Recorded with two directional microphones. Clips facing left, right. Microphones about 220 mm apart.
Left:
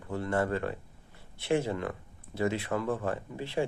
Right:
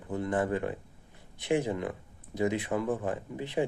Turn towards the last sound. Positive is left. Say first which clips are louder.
# right 1 dB
turn(degrees=-20)  # may be behind; listen again after turning